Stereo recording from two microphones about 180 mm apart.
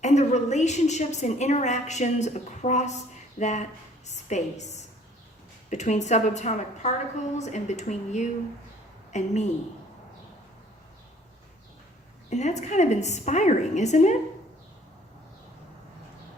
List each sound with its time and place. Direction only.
0.0 s a woman's voice: 40° left (ahead or behind)
12.3 s a woman's voice: 40° left (ahead or behind)